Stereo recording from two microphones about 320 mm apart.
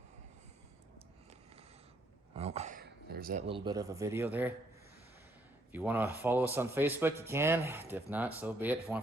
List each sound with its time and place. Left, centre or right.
2.3 s speech: centre
5.7 s speech: centre